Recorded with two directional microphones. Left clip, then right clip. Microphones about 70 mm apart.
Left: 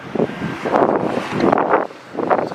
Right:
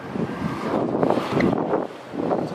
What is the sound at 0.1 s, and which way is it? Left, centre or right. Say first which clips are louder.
Vehicle: left 8 dB; left.